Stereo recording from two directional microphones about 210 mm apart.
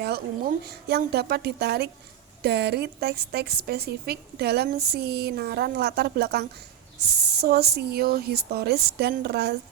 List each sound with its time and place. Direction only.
0.0 s a woman's voice: 50° right (ahead or behind)